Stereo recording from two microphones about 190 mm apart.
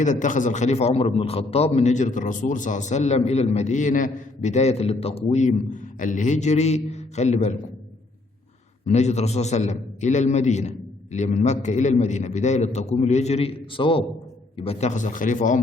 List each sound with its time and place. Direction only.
0.0 s a man's voice: 40° left (ahead or behind)
8.9 s a man's voice: 35° left (ahead or behind)